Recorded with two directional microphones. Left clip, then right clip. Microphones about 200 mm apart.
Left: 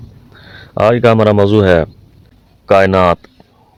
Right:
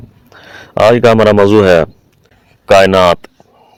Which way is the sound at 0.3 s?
30° right (ahead or behind).